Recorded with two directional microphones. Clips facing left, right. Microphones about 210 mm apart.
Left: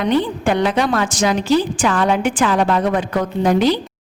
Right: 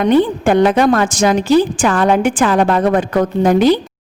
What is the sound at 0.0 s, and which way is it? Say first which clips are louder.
A woman's voice: right 5 dB; 50° right (ahead or behind).